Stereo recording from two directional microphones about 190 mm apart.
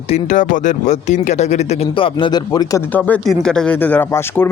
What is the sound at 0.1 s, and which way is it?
Speech, 40° left (ahead or behind).